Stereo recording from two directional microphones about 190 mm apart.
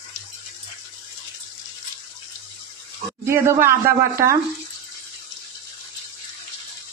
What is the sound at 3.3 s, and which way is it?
Speech, 15° right (ahead or behind).